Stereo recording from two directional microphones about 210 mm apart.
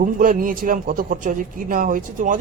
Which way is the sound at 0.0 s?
40° right (ahead or behind).